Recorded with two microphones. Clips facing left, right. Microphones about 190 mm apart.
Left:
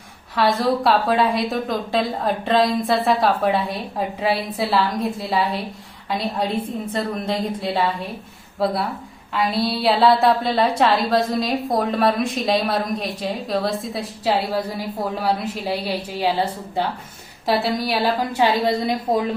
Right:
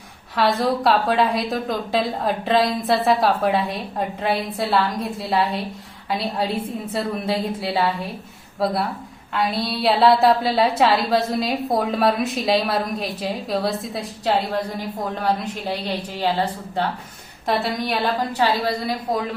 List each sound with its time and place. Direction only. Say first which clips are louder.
0.3 s a woman's voice: left 1 dB; centre (ahead or behind)
18.3 s a woman's voice: left 4 dB; 20° left (ahead or behind)